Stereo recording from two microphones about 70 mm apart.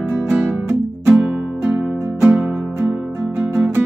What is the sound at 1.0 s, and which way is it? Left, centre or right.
Music, centre.